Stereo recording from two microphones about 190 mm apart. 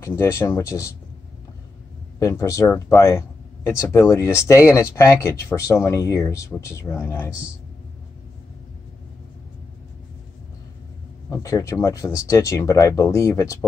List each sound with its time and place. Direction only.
0.0 s speech: 15° left (ahead or behind)
2.1 s speech: 15° left (ahead or behind)
11.2 s speech: 15° left (ahead or behind)